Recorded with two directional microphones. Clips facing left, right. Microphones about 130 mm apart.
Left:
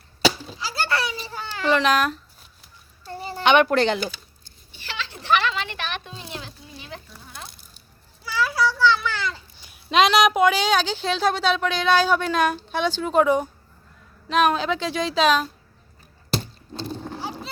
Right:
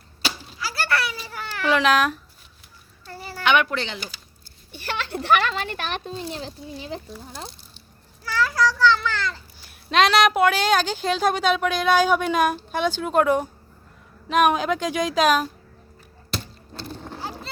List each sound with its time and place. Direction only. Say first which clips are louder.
0.6 s a sound: even; 25° left (ahead or behind)
1.6 s speech: even; centre (ahead or behind)
3.1 s a sound: left 3 dB; 25° left (ahead or behind)
3.7 s speech: left 9 dB; 50° left (ahead or behind)
4.7 s speech: right 6 dB; 55° right (ahead or behind); by 7.4 s 30° right (ahead or behind)
8.2 s a child's voice: right 1 dB; 10° left (ahead or behind)
9.9 s a woman's voice: left 1 dB; centre (ahead or behind)
16.7 s speech: left 5 dB; 20° left (ahead or behind)
17.0 s clip-clop: left 2 dB; centre (ahead or behind)